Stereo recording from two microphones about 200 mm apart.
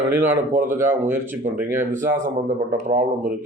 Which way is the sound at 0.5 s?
40° right (ahead or behind).